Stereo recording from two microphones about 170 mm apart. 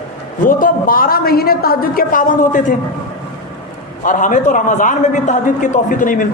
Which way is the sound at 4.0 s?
50° left (ahead or behind).